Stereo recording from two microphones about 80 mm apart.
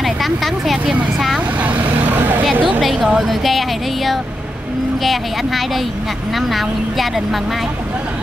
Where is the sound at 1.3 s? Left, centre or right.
Centre.